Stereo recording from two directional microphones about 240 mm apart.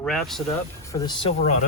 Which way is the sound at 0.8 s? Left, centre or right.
Centre.